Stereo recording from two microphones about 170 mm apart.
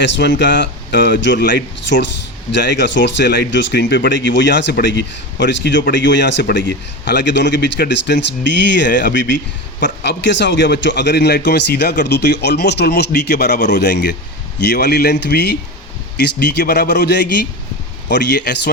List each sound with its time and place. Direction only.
0.0 s a man's voice: 90° left